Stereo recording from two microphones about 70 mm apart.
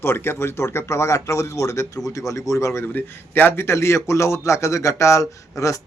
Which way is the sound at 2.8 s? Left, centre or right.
Left.